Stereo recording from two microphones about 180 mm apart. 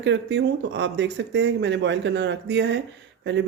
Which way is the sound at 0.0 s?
80° right.